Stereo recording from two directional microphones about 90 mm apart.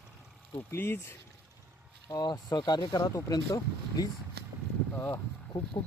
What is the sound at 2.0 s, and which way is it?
Speech, 45° left (ahead or behind).